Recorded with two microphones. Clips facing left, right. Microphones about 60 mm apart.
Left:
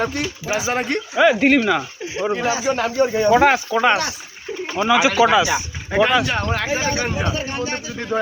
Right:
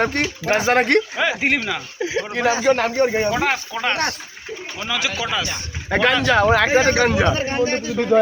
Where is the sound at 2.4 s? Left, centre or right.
Right.